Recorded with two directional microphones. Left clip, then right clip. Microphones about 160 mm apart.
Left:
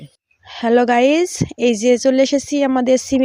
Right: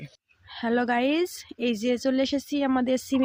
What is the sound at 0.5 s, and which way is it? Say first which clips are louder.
Speech: left 11 dB; 45° left (ahead or behind).